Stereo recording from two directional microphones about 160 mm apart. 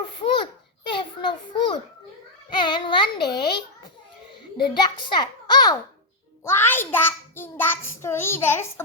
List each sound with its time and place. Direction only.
0.0 s babbling: 35° left (ahead or behind)
0.9 s children playing: 30° left (ahead or behind)
2.6 s child singing: 30° left (ahead or behind)
3.3 s a child's voice: 30° left (ahead or behind)
6.4 s a child's voice: 15° left (ahead or behind)